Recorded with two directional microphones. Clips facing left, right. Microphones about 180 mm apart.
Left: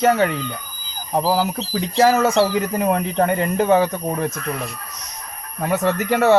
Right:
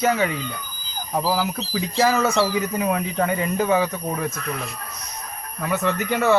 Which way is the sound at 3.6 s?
35° left (ahead or behind).